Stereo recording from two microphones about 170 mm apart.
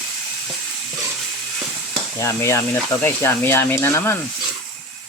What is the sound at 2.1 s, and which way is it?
Speech, 15° left (ahead or behind).